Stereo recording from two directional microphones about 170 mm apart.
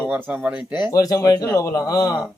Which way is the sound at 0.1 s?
10° right (ahead or behind).